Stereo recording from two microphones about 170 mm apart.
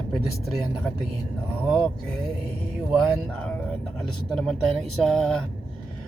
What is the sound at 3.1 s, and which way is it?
Speech, 5° left (ahead or behind).